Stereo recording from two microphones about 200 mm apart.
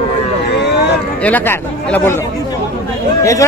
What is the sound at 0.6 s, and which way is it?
Speech, 55° left (ahead or behind).